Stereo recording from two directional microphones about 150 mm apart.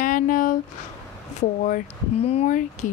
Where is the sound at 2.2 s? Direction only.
45° left (ahead or behind).